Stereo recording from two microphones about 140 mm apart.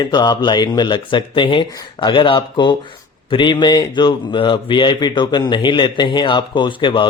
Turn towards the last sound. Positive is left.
turn(degrees=35)  # may be behind; listen again after turning